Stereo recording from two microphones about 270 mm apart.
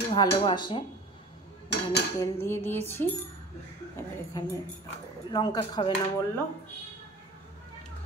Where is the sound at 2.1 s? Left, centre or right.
Centre.